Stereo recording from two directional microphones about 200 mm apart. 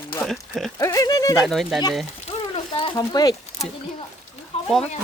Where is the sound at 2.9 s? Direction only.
20° left (ahead or behind).